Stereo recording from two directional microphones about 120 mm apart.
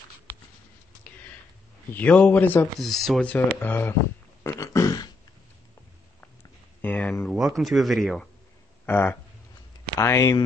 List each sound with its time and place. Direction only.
2.0 s speech: 15° left (ahead or behind)
2.8 s speech: centre (ahead or behind)
4.4 s a sound: 25° left (ahead or behind)
6.8 s a sound: 5° left (ahead or behind)
7.2 s speech: centre (ahead or behind)
8.8 s speech: 20° left (ahead or behind)